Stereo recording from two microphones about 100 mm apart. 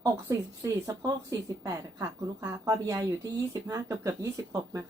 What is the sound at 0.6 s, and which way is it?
A woman's voice, 35° right (ahead or behind).